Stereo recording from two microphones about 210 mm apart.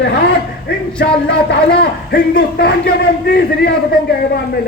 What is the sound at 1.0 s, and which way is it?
Speech, 50° left (ahead or behind).